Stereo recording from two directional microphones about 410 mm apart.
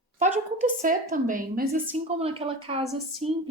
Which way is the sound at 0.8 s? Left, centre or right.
Centre.